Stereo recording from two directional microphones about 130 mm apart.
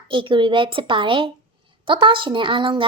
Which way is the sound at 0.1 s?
40° right (ahead or behind).